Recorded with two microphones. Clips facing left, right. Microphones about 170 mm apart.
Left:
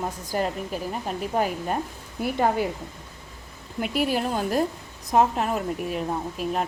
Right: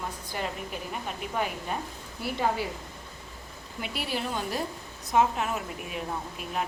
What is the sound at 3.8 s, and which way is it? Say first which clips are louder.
A woman's voice: left 8 dB; 45° left (ahead or behind).